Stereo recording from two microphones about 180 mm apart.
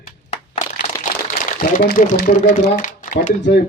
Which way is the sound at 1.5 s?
50° left (ahead or behind).